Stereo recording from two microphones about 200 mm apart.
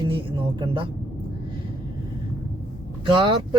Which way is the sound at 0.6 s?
20° right (ahead or behind).